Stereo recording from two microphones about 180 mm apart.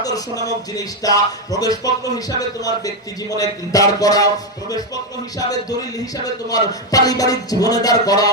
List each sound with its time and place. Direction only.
0.0 s speech: 20° left (ahead or behind)
6.2 s speech: 20° left (ahead or behind)